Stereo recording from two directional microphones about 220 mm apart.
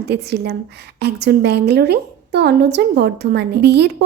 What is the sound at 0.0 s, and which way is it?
A woman's voice, 50° right (ahead or behind).